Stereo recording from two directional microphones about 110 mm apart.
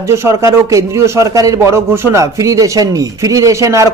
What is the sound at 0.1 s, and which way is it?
A man's voice, 25° right (ahead or behind).